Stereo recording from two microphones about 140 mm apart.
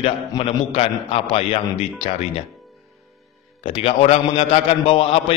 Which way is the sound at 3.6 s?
40° left (ahead or behind).